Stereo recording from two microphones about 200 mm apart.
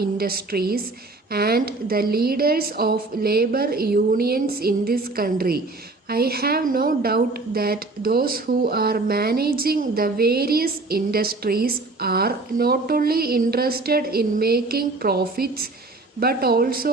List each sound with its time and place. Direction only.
0.0 s speech: 50° right (ahead or behind)